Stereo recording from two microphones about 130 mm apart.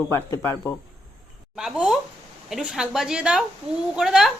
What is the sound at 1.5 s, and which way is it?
A woman's voice, 5° right (ahead or behind).